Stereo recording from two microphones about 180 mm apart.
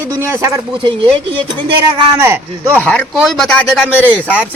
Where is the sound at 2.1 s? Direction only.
15° right (ahead or behind).